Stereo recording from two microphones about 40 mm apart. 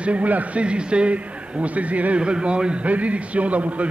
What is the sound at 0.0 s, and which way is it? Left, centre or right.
A man's voice, right.